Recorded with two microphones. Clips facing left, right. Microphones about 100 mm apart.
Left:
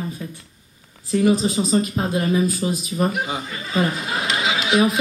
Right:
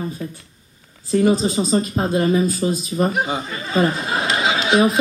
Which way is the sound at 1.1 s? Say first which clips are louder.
Right 1 dB; 35° right (ahead or behind).